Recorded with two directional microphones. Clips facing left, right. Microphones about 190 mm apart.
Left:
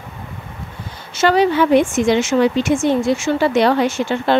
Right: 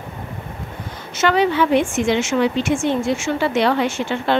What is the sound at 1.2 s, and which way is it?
Speech, 35° left (ahead or behind).